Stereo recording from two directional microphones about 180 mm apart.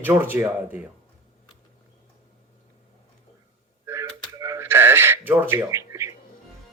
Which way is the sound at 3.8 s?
15° right (ahead or behind).